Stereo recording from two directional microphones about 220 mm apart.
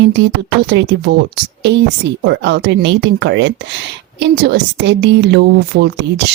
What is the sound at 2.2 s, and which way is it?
Speech, 50° right (ahead or behind).